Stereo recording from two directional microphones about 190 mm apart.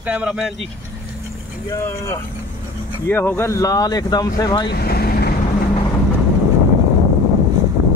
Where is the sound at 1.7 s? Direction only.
15° left (ahead or behind).